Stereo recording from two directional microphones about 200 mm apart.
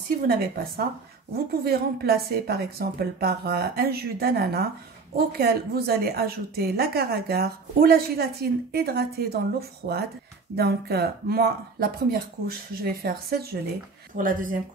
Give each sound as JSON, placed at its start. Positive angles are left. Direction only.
{"t": 0.3, "sound": "a woman's voice", "side_deg": -50}